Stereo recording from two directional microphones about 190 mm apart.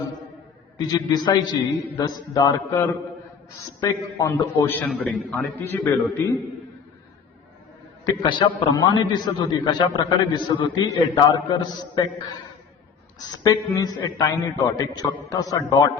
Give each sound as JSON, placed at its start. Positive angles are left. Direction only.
{"t": 0.8, "sound": "a man's voice", "side_deg": 20}
{"t": 8.0, "sound": "a man's voice", "side_deg": 25}
{"t": 13.3, "sound": "a man's voice", "side_deg": 15}